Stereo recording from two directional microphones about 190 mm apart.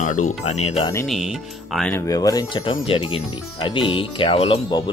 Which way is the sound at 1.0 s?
Centre (ahead or behind).